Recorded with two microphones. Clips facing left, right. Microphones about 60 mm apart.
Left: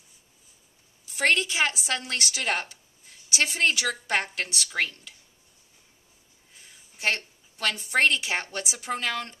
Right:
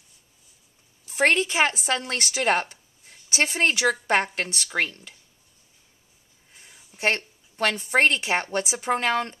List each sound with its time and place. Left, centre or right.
1.1 s a woman's voice: right
7.0 s a woman's voice: right